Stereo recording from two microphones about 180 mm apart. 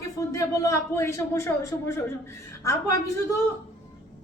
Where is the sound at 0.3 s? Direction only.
20° left (ahead or behind).